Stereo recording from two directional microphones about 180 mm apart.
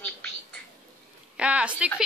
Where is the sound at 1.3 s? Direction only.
5° right (ahead or behind).